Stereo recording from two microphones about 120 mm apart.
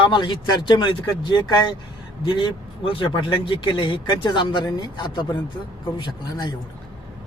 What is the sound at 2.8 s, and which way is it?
Speech, 45° left (ahead or behind).